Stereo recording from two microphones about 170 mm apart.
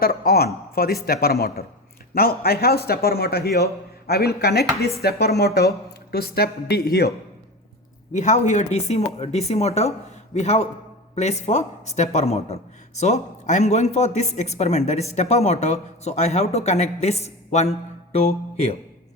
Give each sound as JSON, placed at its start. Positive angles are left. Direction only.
{"t": 0.0, "sound": "a man's voice", "side_deg": 65}
{"t": 8.1, "sound": "speech", "side_deg": 45}